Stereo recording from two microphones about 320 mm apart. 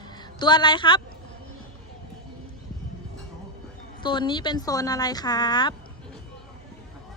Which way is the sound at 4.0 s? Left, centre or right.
Centre.